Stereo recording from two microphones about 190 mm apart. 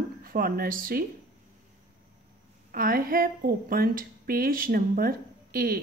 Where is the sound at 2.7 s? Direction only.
50° right (ahead or behind).